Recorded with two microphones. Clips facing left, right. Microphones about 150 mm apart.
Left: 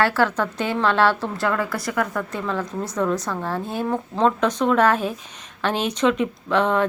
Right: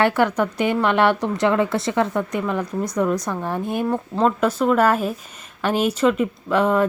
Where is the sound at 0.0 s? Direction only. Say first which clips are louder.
Right 2 dB; 15° right (ahead or behind).